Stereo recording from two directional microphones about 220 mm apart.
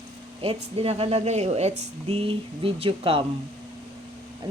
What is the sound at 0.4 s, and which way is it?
Speech, 25° right (ahead or behind).